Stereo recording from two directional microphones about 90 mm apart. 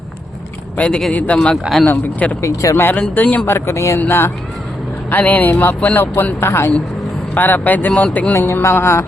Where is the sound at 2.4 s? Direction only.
40° left (ahead or behind).